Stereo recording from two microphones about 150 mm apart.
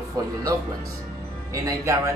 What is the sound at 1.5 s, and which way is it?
Speech, 20° right (ahead or behind).